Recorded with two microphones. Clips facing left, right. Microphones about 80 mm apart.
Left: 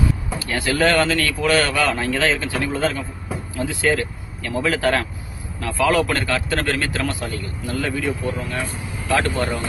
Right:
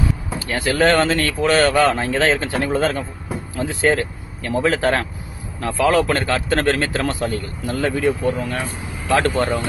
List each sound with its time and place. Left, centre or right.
0.4 s speech: right